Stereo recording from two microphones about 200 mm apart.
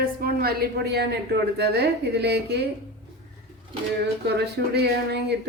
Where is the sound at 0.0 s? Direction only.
50° right (ahead or behind).